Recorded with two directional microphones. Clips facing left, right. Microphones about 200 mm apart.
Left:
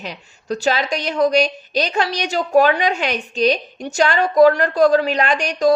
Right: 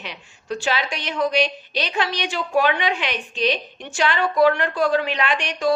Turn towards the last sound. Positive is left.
turn(degrees=40)  # may be behind; listen again after turning